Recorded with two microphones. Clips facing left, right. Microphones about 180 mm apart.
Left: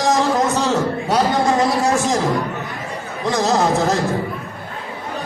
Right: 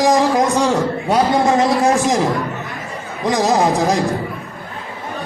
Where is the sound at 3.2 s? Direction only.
15° right (ahead or behind).